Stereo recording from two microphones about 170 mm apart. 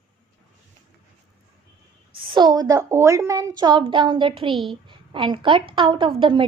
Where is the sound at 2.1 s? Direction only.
30° right (ahead or behind).